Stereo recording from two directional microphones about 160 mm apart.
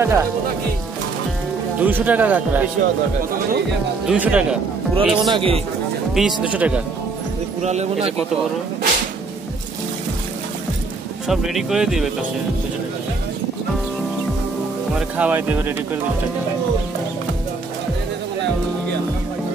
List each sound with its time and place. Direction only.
0.0 s speech: 15° right (ahead or behind)
1.8 s speech: 10° right (ahead or behind)
4.1 s speech: 5° right (ahead or behind)
5.3 s a man's voice: 35° right (ahead or behind)
6.1 s speech: 5° right (ahead or behind)
7.6 s speech: 45° right (ahead or behind)
11.2 s speech: centre (ahead or behind)
15.0 s speech: 10° right (ahead or behind)